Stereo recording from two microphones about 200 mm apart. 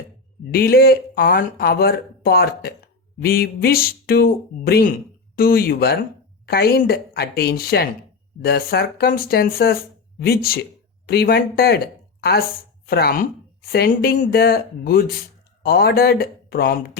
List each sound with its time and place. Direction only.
0.5 s speech: 50° left (ahead or behind)
12.9 s speech: 50° left (ahead or behind)